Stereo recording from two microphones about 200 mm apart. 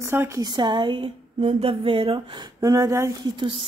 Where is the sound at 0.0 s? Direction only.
15° right (ahead or behind).